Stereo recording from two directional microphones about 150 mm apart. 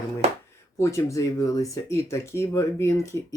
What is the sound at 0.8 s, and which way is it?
Speech, 20° left (ahead or behind).